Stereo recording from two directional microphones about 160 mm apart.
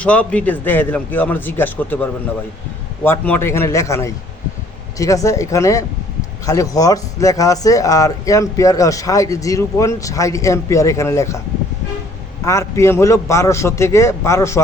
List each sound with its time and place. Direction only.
0.0 s a man's voice: 10° left (ahead or behind)
12.5 s a man's voice: 15° left (ahead or behind)